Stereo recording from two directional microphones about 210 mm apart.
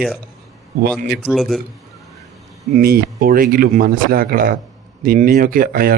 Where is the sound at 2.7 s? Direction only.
45° right (ahead or behind).